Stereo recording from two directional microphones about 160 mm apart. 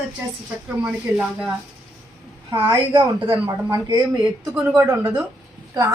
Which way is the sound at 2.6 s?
30° right (ahead or behind).